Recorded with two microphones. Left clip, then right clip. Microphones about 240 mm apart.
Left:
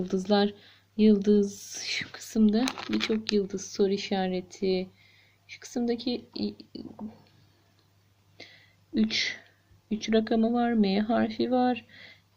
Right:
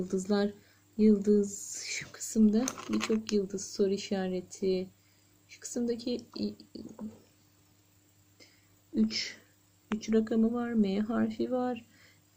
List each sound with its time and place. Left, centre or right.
0.0 s speech: centre
4.6 s speech: left
5.5 s speech: centre
6.0 s speech: left
9.0 s speech: centre